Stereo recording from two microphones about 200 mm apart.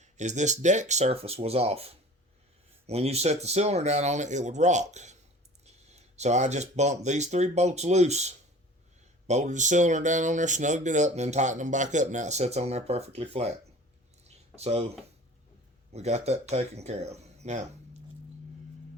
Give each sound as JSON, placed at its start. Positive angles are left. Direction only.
{"t": 0.0, "sound": "speech", "side_deg": -35}
{"t": 14.3, "sound": "a sound", "side_deg": -30}
{"t": 15.9, "sound": "speech", "side_deg": -35}